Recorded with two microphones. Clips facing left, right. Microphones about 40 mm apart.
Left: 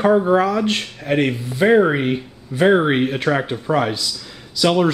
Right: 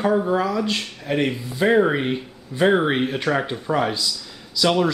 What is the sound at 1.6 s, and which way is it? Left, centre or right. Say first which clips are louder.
A man's voice: left 3 dB; centre.